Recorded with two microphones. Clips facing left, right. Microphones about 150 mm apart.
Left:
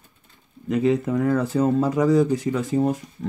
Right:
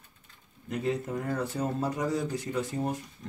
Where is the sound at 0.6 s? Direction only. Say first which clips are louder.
Left 10 dB; 90° left.